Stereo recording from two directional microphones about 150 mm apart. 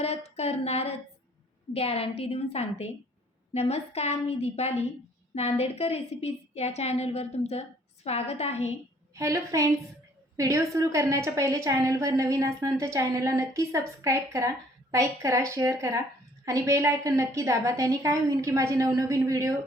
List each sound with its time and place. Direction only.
0.0 s a woman's voice: 45° left (ahead or behind)
9.1 s a woman's voice: 20° right (ahead or behind)